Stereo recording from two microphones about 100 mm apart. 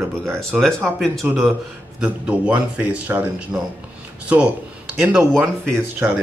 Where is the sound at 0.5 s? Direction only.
5° right (ahead or behind).